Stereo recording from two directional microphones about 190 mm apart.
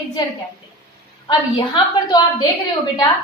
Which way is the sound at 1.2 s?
25° left (ahead or behind).